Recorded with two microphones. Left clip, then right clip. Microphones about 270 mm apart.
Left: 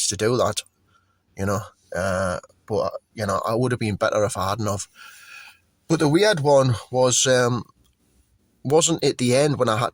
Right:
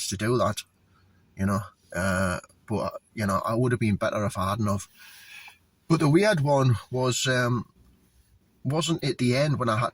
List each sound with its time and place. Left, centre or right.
0.2 s speech: left
5.9 s speech: left
8.7 s speech: left